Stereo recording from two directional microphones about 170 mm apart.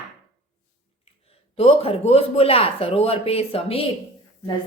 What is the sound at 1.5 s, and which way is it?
A man's voice, 35° left (ahead or behind).